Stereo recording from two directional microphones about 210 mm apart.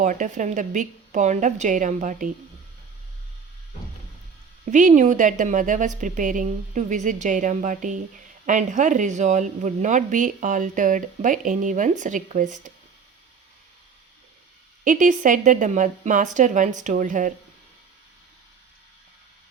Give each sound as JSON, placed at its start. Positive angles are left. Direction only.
{"t": 0.0, "sound": "speech", "side_deg": -35}
{"t": 4.6, "sound": "speech", "side_deg": -35}
{"t": 14.8, "sound": "speech", "side_deg": -40}